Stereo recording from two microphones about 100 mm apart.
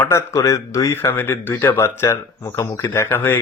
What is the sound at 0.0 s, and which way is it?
Speech, 25° left (ahead or behind).